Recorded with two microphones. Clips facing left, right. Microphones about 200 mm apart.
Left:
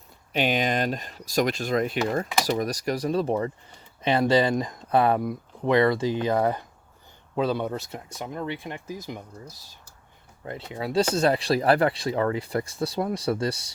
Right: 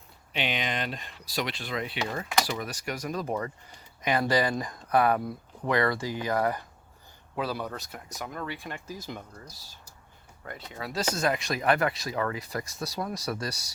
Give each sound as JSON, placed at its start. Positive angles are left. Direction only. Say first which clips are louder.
{"t": 0.3, "sound": "speech", "louder": "left 7 dB", "side_deg": 45}
{"t": 10.4, "sound": "speech", "louder": "left 7 dB", "side_deg": 25}